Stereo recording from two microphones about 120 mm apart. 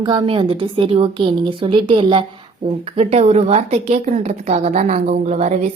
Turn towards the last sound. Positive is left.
turn(degrees=-85)